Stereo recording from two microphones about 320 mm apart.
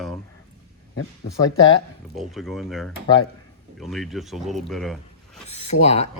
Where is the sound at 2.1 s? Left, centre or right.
Centre.